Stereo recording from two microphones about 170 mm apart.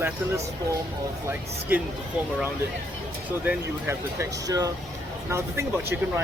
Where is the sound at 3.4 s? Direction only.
15° right (ahead or behind).